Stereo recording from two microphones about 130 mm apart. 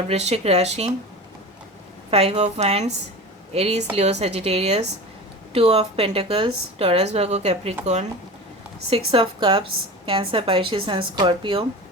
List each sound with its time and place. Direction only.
0.1 s a woman's voice: 55° right (ahead or behind)
2.0 s a woman's voice: 50° right (ahead or behind)
8.9 s speech: 45° right (ahead or behind)